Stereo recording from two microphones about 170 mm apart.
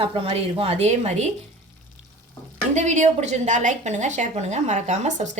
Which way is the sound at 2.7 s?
45° right (ahead or behind).